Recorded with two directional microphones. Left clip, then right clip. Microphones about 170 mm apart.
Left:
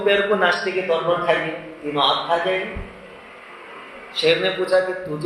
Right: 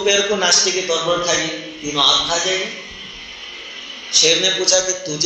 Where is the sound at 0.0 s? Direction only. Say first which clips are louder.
Right 1 dB; 15° right (ahead or behind).